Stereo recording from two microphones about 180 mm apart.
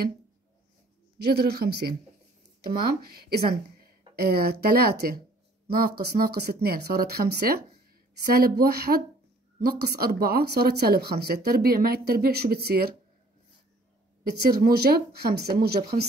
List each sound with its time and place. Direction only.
1.1 s speech: 60° right (ahead or behind)
14.5 s speech: 60° right (ahead or behind)